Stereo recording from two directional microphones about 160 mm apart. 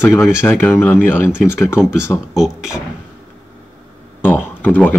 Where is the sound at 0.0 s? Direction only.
15° left (ahead or behind).